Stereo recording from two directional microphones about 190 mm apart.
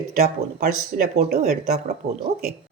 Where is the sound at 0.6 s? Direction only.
50° right (ahead or behind).